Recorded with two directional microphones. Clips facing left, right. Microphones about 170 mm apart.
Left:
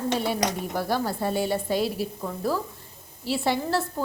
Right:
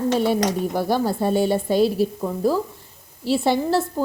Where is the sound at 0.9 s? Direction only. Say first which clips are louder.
Right 5 dB; 25° right (ahead or behind).